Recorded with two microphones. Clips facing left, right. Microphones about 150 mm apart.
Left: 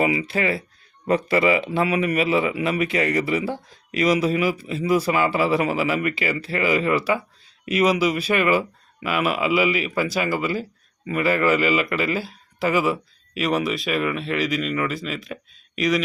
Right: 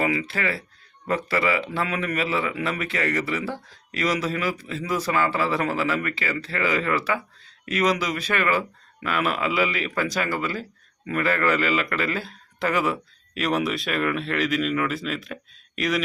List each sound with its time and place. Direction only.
0.0 s speech: 15° left (ahead or behind)